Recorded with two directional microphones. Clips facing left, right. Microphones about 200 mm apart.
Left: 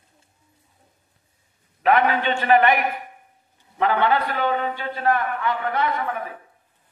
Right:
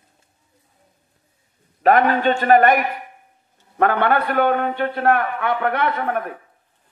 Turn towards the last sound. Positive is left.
turn(degrees=-60)  # may be behind; listen again after turning